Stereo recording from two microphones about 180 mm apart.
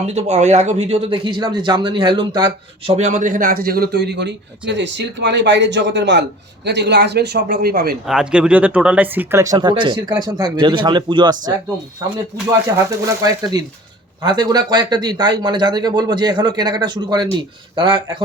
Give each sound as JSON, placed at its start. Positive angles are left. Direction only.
{"t": 0.1, "sound": "a man's voice", "side_deg": -40}
{"t": 8.0, "sound": "speech", "side_deg": -5}
{"t": 12.7, "sound": "speech", "side_deg": -20}